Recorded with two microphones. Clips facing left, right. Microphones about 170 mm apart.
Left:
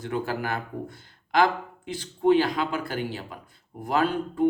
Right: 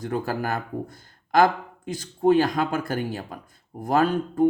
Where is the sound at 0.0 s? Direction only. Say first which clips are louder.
Right 2 dB; 40° right (ahead or behind).